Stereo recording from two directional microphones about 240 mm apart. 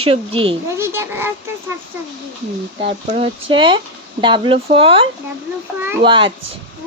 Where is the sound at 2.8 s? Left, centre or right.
Right.